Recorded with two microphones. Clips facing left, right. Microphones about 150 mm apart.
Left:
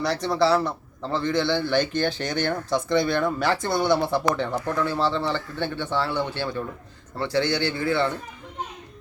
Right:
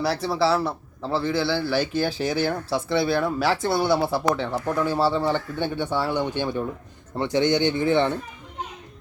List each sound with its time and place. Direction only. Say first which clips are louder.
0.0 s a man's voice: even; 5° right (ahead or behind)